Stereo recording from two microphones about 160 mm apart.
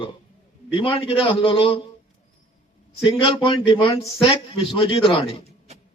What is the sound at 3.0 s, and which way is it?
A man's voice, 30° left (ahead or behind).